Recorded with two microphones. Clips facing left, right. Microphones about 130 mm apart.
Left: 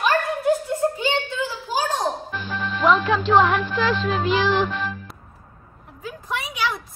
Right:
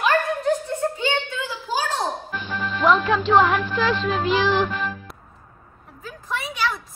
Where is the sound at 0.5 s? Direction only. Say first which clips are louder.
Left 5 dB; 10° left (ahead or behind).